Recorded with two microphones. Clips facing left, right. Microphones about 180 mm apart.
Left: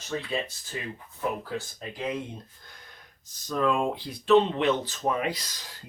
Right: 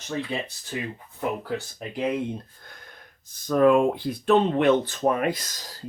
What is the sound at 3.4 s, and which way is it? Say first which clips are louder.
Speech: right 8 dB; 55° right (ahead or behind).